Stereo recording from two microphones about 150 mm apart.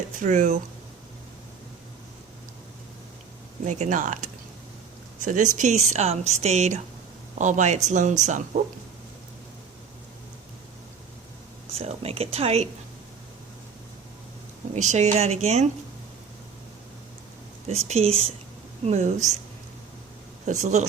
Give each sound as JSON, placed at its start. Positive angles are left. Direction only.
{"t": 0.2, "sound": "speech", "side_deg": -55}
{"t": 3.7, "sound": "speech", "side_deg": -55}
{"t": 11.7, "sound": "speech", "side_deg": -45}
{"t": 14.8, "sound": "speech", "side_deg": -50}
{"t": 17.7, "sound": "speech", "side_deg": -45}
{"t": 20.5, "sound": "speech", "side_deg": -50}